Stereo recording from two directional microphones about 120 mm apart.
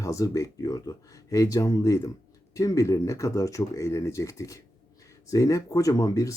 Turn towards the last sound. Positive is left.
turn(degrees=30)  # may be behind; listen again after turning